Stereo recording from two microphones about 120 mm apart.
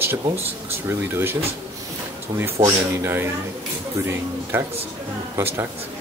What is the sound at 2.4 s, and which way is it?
Speech, 20° right (ahead or behind).